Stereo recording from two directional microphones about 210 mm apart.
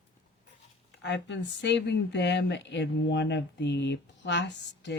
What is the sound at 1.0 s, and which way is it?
Speech, 55° left (ahead or behind).